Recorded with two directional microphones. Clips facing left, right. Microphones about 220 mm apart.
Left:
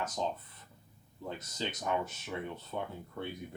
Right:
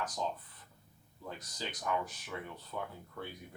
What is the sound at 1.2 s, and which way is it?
Speech, 25° left (ahead or behind).